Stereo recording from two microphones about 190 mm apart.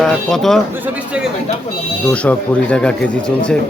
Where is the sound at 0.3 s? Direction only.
Centre (ahead or behind).